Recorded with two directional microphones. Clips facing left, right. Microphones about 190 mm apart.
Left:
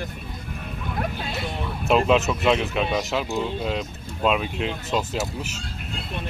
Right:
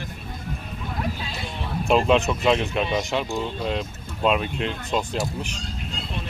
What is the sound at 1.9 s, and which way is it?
Speech, centre (ahead or behind).